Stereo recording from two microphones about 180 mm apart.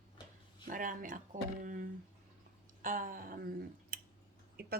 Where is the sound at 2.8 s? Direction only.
50° right (ahead or behind).